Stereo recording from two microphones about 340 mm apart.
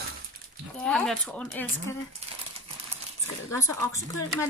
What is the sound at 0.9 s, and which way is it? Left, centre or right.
Speech, centre.